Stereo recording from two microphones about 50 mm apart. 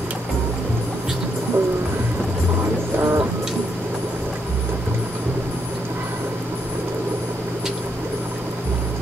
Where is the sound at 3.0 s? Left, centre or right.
Right.